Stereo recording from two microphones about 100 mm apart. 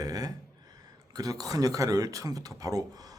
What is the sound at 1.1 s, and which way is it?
Speech, 40° right (ahead or behind).